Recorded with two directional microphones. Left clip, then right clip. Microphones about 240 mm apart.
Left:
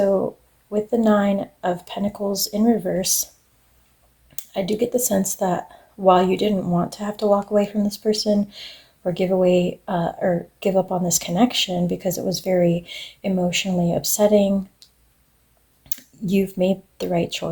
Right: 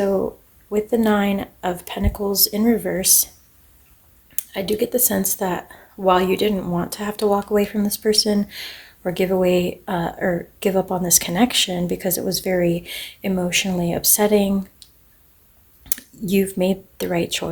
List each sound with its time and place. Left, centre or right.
0.0 s a sound: right
0.7 s speech: right
4.4 s speech: centre
15.8 s speech: right